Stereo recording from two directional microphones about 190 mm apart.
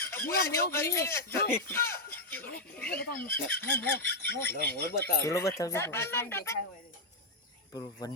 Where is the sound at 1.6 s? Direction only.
10° left (ahead or behind).